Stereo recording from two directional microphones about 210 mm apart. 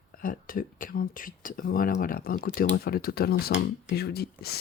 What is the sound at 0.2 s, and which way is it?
Speech, 40° left (ahead or behind).